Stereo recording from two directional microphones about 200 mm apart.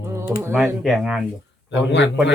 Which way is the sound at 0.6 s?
Centre (ahead or behind).